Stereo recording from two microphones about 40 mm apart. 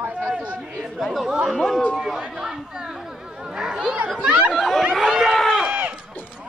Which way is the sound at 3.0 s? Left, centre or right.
Centre.